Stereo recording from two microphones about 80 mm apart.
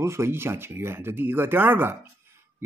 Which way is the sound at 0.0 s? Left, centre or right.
Right.